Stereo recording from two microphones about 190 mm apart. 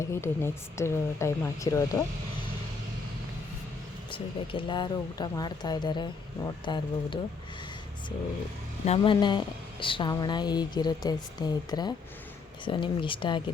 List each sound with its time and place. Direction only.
0.0 s speech: 15° left (ahead or behind)
4.1 s speech: 25° left (ahead or behind)
8.9 s speech: 25° left (ahead or behind)